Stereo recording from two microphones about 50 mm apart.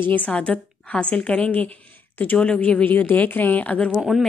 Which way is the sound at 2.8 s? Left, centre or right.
Left.